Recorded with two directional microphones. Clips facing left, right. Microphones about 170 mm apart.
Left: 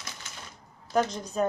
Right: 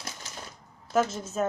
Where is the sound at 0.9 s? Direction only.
5° right (ahead or behind).